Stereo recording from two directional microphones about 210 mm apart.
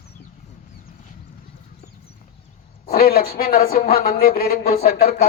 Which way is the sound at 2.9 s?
45° left (ahead or behind).